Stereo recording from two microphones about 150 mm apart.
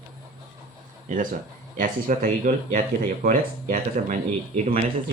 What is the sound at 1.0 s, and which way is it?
Speech, 60° right (ahead or behind).